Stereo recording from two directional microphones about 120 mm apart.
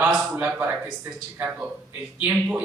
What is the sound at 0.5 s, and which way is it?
A man's voice, 20° right (ahead or behind).